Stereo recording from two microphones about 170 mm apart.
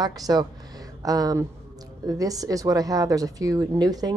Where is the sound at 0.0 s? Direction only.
25° right (ahead or behind).